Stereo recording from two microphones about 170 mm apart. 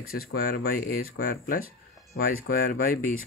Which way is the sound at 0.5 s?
55° left (ahead or behind).